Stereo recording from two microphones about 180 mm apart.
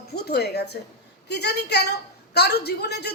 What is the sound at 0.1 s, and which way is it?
A woman's voice, 65° left (ahead or behind).